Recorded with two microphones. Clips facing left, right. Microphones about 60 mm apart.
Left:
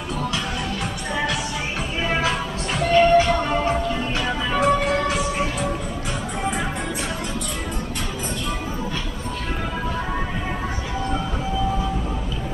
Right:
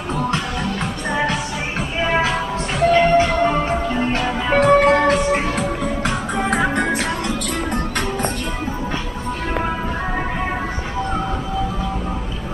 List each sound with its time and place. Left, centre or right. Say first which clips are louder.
2.0 s music: right 4 dB; right